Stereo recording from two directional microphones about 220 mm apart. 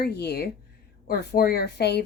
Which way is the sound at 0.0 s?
50° left (ahead or behind).